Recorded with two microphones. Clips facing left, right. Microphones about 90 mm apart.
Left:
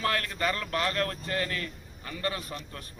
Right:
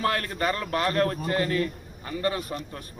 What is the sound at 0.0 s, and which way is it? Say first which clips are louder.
A man's voice: right 3 dB; 30° right (ahead or behind).